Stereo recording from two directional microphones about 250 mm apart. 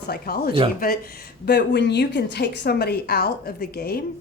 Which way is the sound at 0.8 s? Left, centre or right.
Left.